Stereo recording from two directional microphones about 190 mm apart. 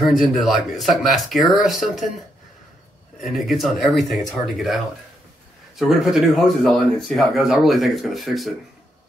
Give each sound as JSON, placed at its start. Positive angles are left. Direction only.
{"t": 0.0, "sound": "speech", "side_deg": 0}
{"t": 3.2, "sound": "speech", "side_deg": 0}